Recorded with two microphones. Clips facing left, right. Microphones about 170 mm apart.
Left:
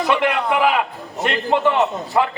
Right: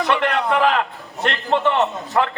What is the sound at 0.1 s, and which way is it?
A man's voice, 10° left (ahead or behind).